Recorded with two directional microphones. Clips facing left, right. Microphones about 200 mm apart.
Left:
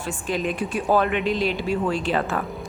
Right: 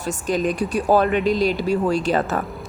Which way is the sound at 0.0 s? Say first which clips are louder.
Right 4 dB; 40° right (ahead or behind).